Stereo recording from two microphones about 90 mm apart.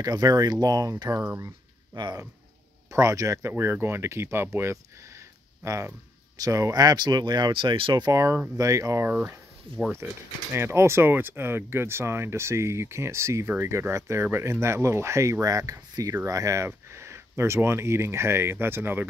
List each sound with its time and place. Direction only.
0.0 s speech: 45° right (ahead or behind)
2.9 s speech: 35° right (ahead or behind)
3.5 s speech: 25° right (ahead or behind); by 8.0 s 65° right (ahead or behind)
8.0 s speech: 35° right (ahead or behind)
9.1 s speech: 20° right (ahead or behind)
9.7 s speech: 85° right
10.5 s speech: 30° right (ahead or behind)